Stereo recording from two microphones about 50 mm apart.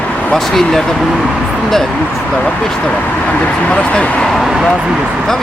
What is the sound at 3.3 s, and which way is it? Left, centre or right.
Speech, left.